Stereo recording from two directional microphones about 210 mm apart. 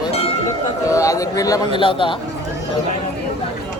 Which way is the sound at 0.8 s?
15° left (ahead or behind).